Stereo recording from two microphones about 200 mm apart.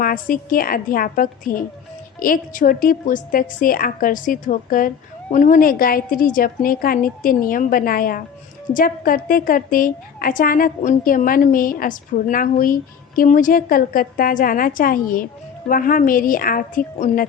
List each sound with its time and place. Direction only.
0.0 s a woman's voice: 45° left (ahead or behind)